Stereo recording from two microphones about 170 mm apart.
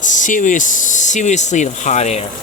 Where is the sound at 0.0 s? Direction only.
50° left (ahead or behind).